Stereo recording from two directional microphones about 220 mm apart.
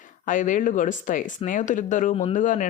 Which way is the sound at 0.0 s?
35° left (ahead or behind).